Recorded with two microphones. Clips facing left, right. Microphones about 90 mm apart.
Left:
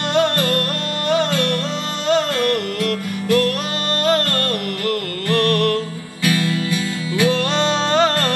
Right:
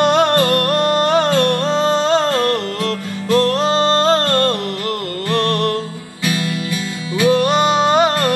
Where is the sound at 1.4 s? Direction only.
25° right (ahead or behind).